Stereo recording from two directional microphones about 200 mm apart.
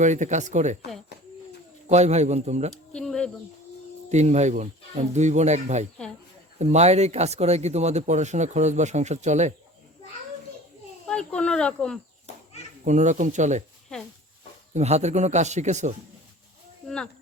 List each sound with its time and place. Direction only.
0.0 s speech: 35° right (ahead or behind)
1.9 s speech: 35° right (ahead or behind)
2.9 s a sound: 5° left (ahead or behind)
4.1 s speech: 35° right (ahead or behind)
11.1 s speech: 5° left (ahead or behind)
12.8 s speech: 35° right (ahead or behind)
14.7 s speech: 35° right (ahead or behind)